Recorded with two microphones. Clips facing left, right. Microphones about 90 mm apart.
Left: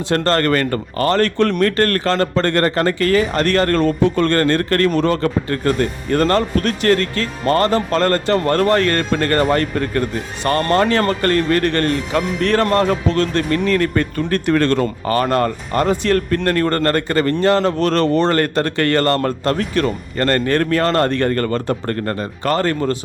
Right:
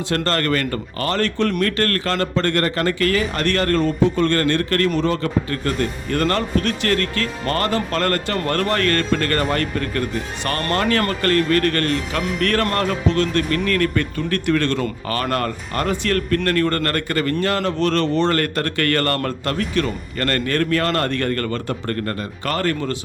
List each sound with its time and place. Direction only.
0.1 s speech: 35° left (ahead or behind)
3.8 s speech: 65° left (ahead or behind)
4.3 s speech: 40° left (ahead or behind)
4.9 s a man's voice: 50° left (ahead or behind)
15.1 s a man's voice: 25° left (ahead or behind)
17.7 s speech: 40° left (ahead or behind)
18.3 s a man's voice: 30° left (ahead or behind)
19.5 s speech: 35° left (ahead or behind)